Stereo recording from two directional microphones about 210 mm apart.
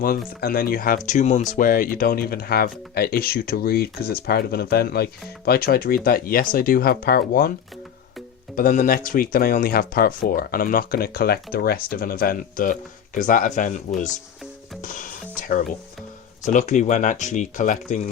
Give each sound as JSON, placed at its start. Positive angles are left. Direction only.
{"t": 0.0, "sound": "speech", "side_deg": 45}
{"t": 8.5, "sound": "speech", "side_deg": 40}